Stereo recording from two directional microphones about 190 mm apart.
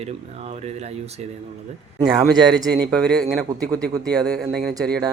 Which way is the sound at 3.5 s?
20° right (ahead or behind).